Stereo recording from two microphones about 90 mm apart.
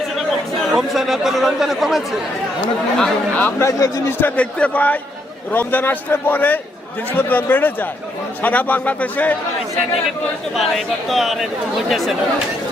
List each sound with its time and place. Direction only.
0.2 s speech: centre (ahead or behind)
3.6 s a man's voice: 35° left (ahead or behind)
4.2 s a man's voice: 15° left (ahead or behind)
10.5 s speech: centre (ahead or behind)